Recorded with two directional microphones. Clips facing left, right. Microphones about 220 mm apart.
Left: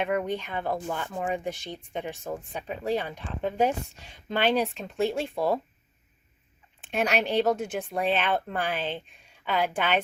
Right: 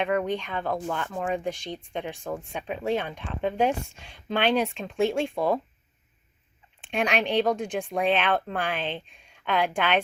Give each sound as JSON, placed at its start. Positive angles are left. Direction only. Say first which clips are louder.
{"t": 0.0, "sound": "speech", "louder": "right 2 dB", "side_deg": 5}
{"t": 6.9, "sound": "speech", "louder": "right 1 dB", "side_deg": 5}